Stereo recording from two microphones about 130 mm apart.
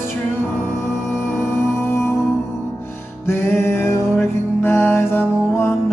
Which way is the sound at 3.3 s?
20° left (ahead or behind).